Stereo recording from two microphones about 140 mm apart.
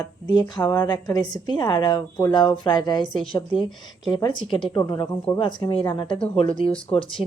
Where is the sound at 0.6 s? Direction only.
10° left (ahead or behind).